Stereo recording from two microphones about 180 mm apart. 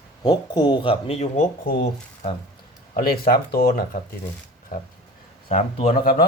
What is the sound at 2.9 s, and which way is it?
Speech, 55° left (ahead or behind).